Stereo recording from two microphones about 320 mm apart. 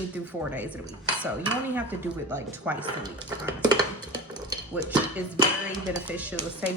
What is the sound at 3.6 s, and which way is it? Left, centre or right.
Dishes, centre.